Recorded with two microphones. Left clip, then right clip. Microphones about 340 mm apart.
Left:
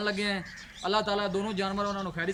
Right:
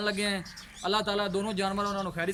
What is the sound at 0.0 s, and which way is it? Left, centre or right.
A man's voice, centre.